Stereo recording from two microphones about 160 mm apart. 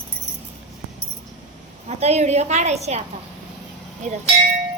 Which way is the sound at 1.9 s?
40° right (ahead or behind).